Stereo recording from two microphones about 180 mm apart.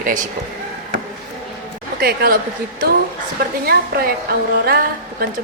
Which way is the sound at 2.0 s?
60° right (ahead or behind).